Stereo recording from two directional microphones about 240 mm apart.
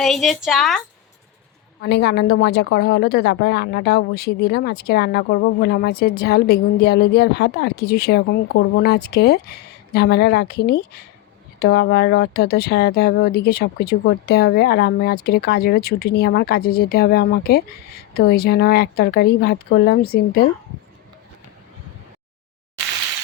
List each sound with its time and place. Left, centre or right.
0.0 s a woman's voice: centre
1.8 s a woman's voice: left